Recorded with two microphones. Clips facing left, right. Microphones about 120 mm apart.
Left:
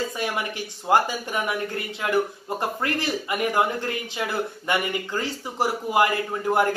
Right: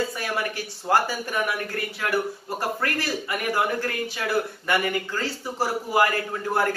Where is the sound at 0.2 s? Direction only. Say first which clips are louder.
Even; 20° left (ahead or behind).